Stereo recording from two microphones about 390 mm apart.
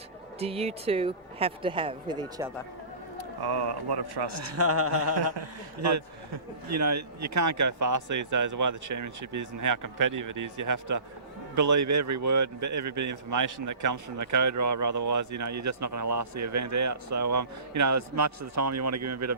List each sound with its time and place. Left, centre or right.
0.3 s speech: centre
3.2 s speech: right
4.5 s a man's voice: right